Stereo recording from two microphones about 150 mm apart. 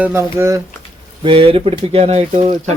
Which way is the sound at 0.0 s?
15° right (ahead or behind).